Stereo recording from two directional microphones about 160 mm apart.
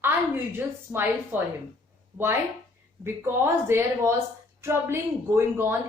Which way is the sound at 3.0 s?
15° right (ahead or behind).